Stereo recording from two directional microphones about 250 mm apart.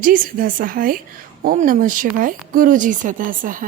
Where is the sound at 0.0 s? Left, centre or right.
Right.